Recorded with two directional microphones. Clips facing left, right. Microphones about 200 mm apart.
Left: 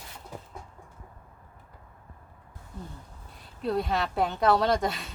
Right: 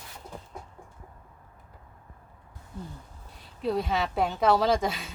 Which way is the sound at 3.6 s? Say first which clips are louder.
Even; centre (ahead or behind).